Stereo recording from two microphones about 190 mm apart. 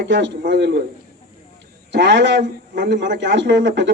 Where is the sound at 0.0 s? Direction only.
65° right (ahead or behind).